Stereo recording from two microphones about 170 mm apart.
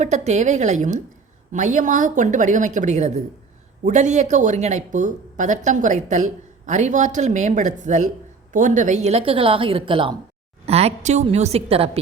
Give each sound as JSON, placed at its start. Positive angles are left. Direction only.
{"t": 0.0, "sound": "a woman's voice", "side_deg": -45}